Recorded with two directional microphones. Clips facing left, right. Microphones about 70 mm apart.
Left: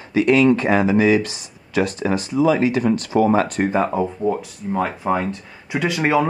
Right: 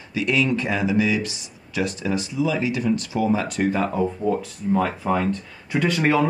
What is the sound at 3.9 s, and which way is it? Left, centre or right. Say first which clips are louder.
Speech: left 2 dB; centre.